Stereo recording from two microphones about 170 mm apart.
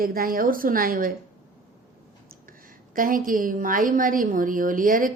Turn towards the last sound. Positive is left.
turn(degrees=-55)  # may be behind; listen again after turning